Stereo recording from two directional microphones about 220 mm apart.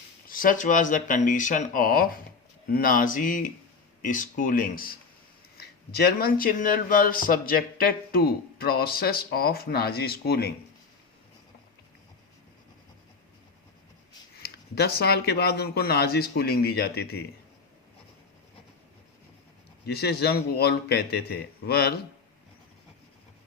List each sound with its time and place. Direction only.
0.3 s speech: 40° left (ahead or behind)
14.3 s speech: 45° left (ahead or behind)
19.8 s speech: 45° left (ahead or behind)